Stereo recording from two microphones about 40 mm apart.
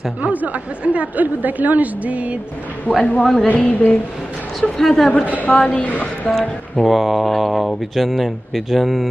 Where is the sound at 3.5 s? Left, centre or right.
Left.